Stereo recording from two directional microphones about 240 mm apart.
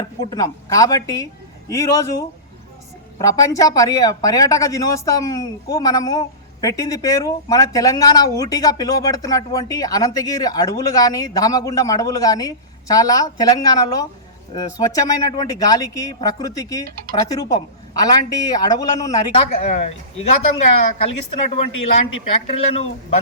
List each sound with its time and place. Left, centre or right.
0.3 s speech: centre
3.2 s speech: centre